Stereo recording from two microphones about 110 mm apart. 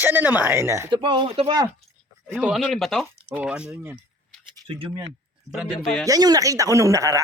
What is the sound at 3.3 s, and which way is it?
Speech, 10° right (ahead or behind).